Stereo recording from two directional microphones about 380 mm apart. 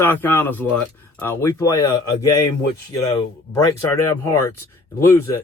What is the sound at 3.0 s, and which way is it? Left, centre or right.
Speech, centre.